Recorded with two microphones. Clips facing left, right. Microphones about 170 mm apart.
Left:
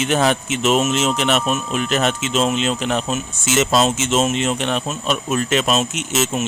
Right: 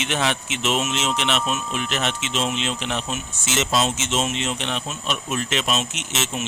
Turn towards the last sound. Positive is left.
turn(degrees=45)  # may be behind; listen again after turning